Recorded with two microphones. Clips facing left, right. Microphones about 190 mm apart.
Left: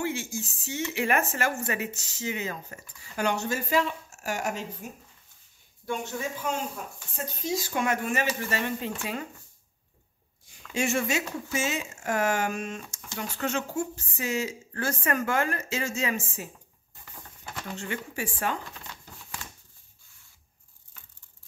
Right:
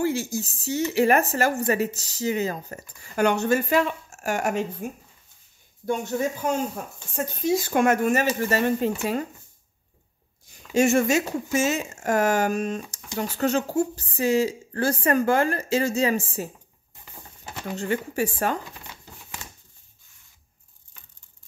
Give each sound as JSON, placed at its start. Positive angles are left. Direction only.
{"t": 0.0, "sound": "speech", "side_deg": -35}
{"t": 3.2, "sound": "speech", "side_deg": -60}
{"t": 5.9, "sound": "speech", "side_deg": -40}
{"t": 7.2, "sound": "speech", "side_deg": -60}
{"t": 10.7, "sound": "speech", "side_deg": -45}
{"t": 16.9, "sound": "a sound", "side_deg": -20}
{"t": 17.7, "sound": "speech", "side_deg": -40}
{"t": 18.7, "sound": "a sound", "side_deg": -15}